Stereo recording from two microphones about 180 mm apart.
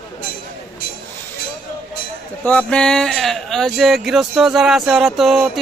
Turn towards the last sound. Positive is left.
turn(degrees=0)  # may be behind; listen again after turning